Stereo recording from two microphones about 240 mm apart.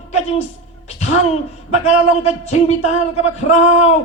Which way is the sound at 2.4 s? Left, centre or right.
Left.